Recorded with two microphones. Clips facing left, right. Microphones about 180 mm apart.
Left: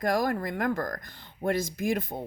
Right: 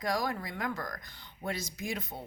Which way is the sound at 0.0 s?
55° left (ahead or behind).